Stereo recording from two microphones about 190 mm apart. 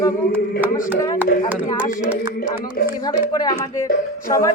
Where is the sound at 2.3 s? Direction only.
50° left (ahead or behind).